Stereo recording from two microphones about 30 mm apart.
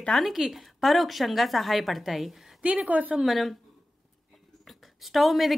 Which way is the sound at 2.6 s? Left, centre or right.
Right.